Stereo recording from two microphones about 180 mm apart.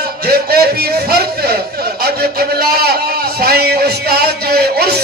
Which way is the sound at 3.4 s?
60° right (ahead or behind).